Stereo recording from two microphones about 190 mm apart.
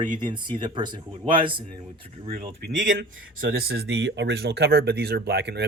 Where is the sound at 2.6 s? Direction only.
60° right (ahead or behind).